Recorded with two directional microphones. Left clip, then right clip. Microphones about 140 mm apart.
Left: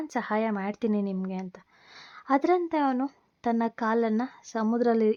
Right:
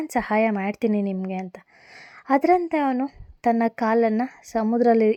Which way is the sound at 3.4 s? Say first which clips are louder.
Right 6 dB; 25° right (ahead or behind).